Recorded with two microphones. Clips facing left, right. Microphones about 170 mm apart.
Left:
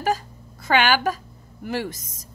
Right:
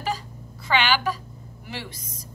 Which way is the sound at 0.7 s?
50° left (ahead or behind).